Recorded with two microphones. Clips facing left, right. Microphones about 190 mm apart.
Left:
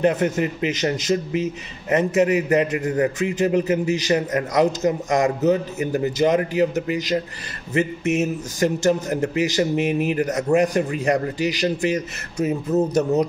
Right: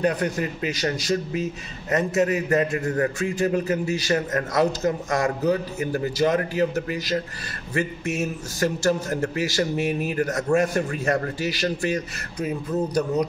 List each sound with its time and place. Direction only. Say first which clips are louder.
0.0 s a man's voice: left 4 dB; 25° left (ahead or behind)